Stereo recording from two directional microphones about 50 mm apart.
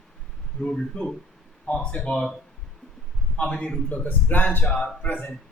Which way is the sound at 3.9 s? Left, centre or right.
Left.